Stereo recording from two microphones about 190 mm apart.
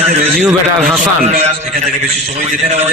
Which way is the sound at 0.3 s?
Centre (ahead or behind).